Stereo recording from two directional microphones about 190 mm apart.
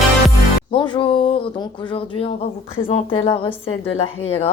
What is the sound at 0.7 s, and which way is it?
A woman's voice, 25° left (ahead or behind).